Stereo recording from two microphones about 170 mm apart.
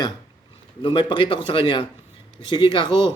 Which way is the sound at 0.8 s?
30° left (ahead or behind).